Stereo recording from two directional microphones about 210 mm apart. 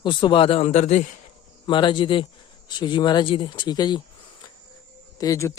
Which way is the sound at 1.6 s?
20° left (ahead or behind).